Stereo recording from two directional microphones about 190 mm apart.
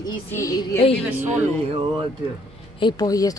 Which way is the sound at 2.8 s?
20° left (ahead or behind).